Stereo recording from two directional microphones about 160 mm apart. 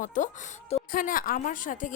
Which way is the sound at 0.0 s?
50° left (ahead or behind).